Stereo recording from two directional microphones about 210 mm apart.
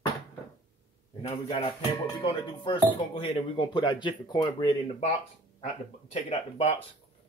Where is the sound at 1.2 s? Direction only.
25° left (ahead or behind).